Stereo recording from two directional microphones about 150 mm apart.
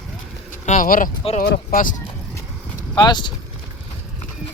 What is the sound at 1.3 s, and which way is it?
Speech, 80° left.